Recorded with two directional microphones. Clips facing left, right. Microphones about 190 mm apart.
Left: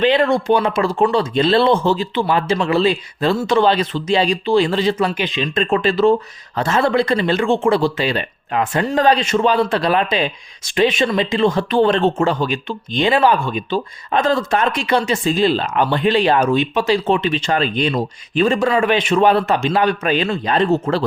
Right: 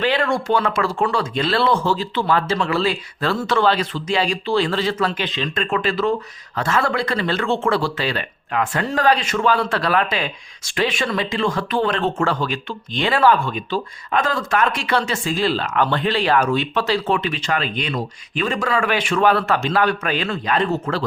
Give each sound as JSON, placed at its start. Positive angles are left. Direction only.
{"t": 0.2, "sound": "speech", "side_deg": 20}
{"t": 5.7, "sound": "speech", "side_deg": 25}